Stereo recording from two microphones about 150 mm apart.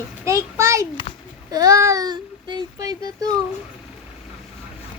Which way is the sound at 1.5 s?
25° right (ahead or behind).